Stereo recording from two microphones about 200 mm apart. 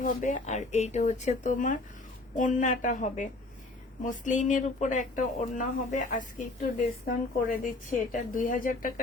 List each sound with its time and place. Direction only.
0.0 s a woman's voice: 40° left (ahead or behind)